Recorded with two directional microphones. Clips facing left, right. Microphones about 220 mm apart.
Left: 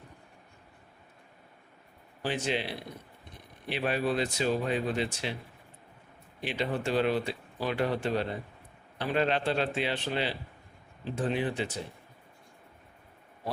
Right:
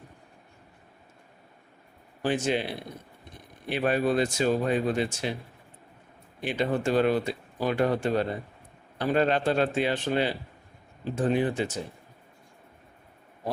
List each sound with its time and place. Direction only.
2.2 s speech: 50° right (ahead or behind)
6.4 s speech: 50° right (ahead or behind)